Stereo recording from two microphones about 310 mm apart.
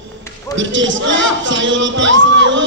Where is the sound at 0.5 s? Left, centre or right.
Right.